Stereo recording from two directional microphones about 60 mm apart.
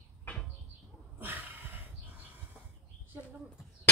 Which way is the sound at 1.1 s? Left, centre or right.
Right.